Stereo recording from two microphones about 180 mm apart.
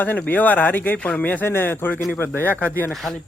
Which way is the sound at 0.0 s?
10° left (ahead or behind).